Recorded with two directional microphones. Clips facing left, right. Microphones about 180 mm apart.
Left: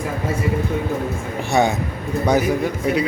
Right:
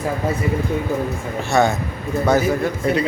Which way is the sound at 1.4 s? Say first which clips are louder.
Right 1 dB; 15° left (ahead or behind).